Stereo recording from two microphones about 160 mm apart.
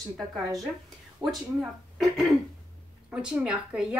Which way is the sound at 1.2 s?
20° right (ahead or behind).